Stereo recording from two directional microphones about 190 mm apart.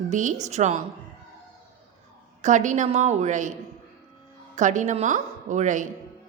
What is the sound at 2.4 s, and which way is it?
A woman's voice, 40° right (ahead or behind).